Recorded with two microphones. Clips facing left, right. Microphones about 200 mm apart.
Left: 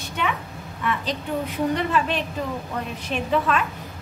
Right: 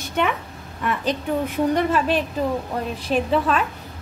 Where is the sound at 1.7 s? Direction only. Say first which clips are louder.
Right 4 dB; 40° right (ahead or behind).